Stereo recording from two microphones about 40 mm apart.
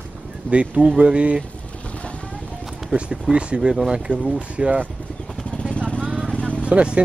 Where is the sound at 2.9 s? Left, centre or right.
Right.